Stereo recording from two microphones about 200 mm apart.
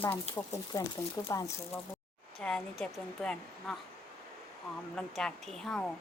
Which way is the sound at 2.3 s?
5° left (ahead or behind).